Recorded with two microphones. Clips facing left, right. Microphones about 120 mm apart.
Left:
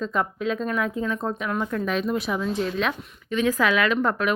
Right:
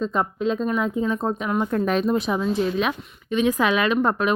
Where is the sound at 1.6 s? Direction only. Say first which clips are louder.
Right 5 dB; 40° right (ahead or behind).